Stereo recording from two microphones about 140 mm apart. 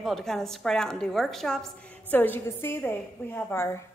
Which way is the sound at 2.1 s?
15° left (ahead or behind).